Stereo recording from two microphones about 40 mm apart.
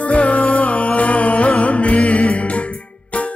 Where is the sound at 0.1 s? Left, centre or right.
Left.